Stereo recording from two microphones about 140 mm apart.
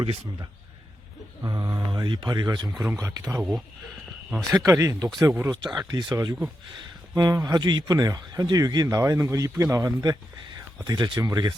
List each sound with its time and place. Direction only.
0.0 s a man's voice: 35° right (ahead or behind)
4.6 s speech: 20° right (ahead or behind)
6.1 s speech: 20° right (ahead or behind)